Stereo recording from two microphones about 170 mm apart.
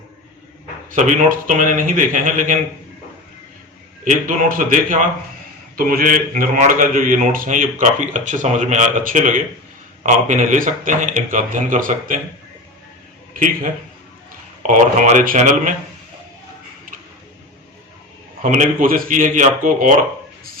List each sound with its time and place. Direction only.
1.5 s speech: 50° right (ahead or behind)
4.0 s speech: 50° right (ahead or behind)
13.3 s a man's voice: 55° right (ahead or behind)
14.6 s speech: 45° right (ahead or behind)
18.4 s speech: 45° right (ahead or behind)